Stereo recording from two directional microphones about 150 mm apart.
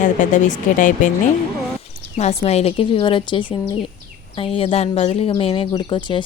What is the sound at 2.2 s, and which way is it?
Speech, 45° left (ahead or behind).